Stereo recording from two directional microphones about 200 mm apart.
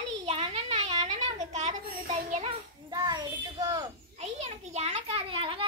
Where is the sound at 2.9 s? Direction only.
20° right (ahead or behind).